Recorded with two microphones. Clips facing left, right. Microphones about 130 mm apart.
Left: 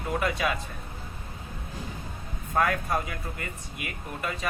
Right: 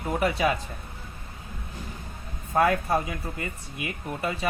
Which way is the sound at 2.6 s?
30° right (ahead or behind).